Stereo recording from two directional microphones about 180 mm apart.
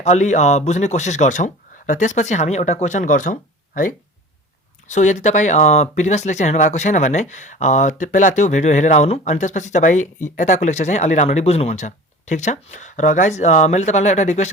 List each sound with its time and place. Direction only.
0.0 s speech: 40° left (ahead or behind)
4.9 s speech: 40° left (ahead or behind)